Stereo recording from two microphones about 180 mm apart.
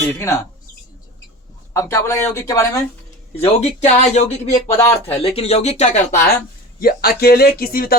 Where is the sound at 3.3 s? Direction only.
35° left (ahead or behind).